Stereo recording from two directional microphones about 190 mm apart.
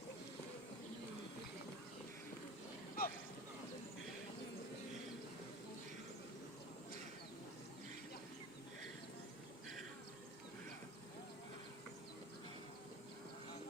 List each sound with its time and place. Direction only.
3.0 s speech: 50° left (ahead or behind)